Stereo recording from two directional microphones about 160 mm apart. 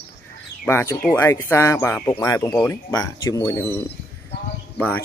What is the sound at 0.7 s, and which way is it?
Speech, 15° left (ahead or behind).